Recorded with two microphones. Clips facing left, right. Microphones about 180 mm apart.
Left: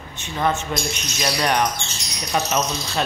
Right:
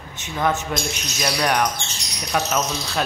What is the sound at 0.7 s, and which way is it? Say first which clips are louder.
Speech: even; centre (ahead or behind).